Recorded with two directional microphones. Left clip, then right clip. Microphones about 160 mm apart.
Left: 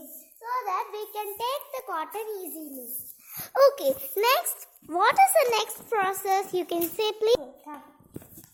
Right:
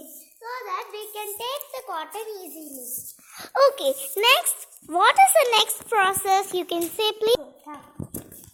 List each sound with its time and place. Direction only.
0.4 s a sound: 90° left; by 2.5 s 65° left (ahead or behind)
3.3 s a child's voice: 15° left (ahead or behind)
7.7 s speech: 30° left (ahead or behind)